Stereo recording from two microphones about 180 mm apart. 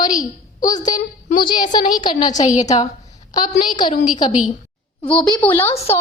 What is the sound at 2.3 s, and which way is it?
Speech, 40° left (ahead or behind).